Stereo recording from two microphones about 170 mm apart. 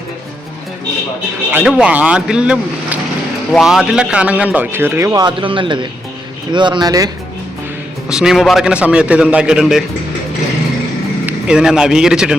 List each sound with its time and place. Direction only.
1.5 s a man's voice: 5° right (ahead or behind)
8.1 s a man's voice: 5° right (ahead or behind)
11.3 s a man's voice: 5° right (ahead or behind)